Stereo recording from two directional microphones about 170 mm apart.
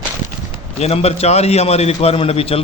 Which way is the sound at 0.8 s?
35° left (ahead or behind).